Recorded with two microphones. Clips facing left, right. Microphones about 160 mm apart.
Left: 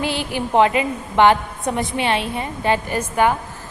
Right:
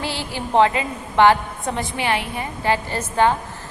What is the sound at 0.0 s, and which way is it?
A woman's voice, 20° left (ahead or behind).